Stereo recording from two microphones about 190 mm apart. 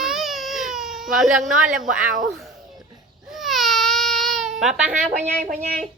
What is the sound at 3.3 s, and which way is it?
Baby cry, centre (ahead or behind).